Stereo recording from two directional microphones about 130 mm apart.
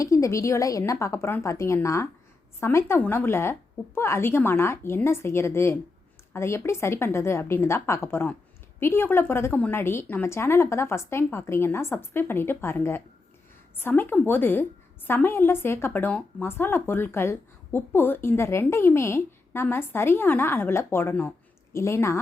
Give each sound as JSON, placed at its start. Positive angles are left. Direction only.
{"t": 0.0, "sound": "a woman's voice", "side_deg": 25}